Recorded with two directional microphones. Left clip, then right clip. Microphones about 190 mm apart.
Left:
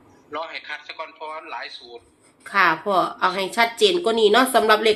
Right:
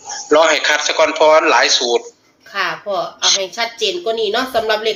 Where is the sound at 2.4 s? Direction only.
45° left (ahead or behind).